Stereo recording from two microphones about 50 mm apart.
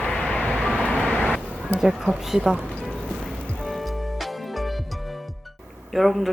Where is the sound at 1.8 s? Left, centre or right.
Centre.